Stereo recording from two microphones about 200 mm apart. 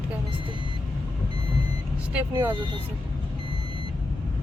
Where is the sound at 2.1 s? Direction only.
10° right (ahead or behind).